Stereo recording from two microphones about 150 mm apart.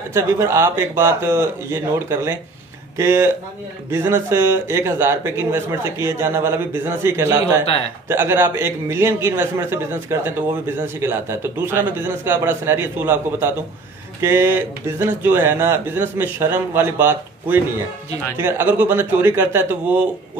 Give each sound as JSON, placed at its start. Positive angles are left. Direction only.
{"t": 0.1, "sound": "speech", "side_deg": -20}